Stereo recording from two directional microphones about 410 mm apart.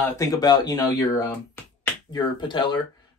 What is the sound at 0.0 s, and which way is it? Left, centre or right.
Speech, centre.